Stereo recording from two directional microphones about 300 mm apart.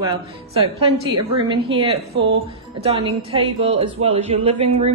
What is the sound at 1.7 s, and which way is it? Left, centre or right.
A woman's voice, centre.